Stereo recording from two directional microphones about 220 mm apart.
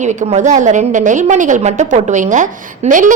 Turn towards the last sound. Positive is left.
turn(degrees=-35)  # may be behind; listen again after turning